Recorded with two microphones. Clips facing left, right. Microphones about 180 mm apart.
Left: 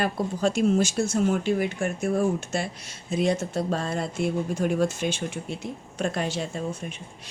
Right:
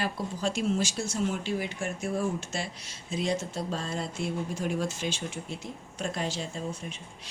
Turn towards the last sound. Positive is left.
turn(degrees=55)  # may be behind; listen again after turning